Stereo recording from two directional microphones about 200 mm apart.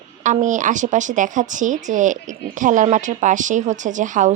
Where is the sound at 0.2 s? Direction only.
40° right (ahead or behind).